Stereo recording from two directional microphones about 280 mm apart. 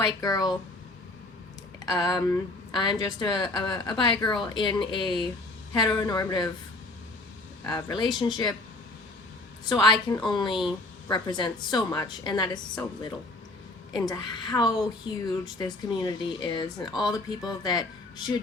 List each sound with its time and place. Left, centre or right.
0.0 s a woman's voice: centre
1.8 s a woman's voice: centre
7.6 s a woman's voice: centre
9.6 s a woman's voice: centre